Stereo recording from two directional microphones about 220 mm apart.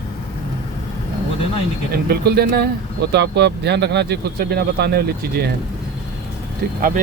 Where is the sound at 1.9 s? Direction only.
45° right (ahead or behind).